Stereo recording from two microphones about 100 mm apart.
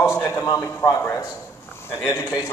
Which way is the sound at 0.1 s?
25° left (ahead or behind).